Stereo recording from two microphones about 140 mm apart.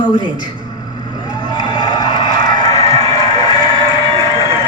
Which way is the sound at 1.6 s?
30° left (ahead or behind).